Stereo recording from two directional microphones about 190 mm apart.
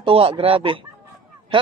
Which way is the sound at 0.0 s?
30° right (ahead or behind).